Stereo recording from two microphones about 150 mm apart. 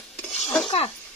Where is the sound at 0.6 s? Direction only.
40° left (ahead or behind).